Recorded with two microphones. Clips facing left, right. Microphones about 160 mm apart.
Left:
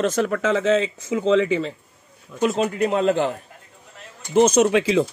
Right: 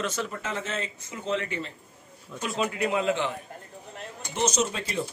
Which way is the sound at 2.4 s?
45° left (ahead or behind).